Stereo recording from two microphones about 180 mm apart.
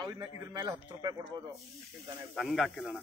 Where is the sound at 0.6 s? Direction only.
20° right (ahead or behind).